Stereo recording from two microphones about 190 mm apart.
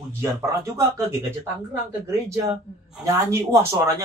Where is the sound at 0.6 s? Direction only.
15° right (ahead or behind).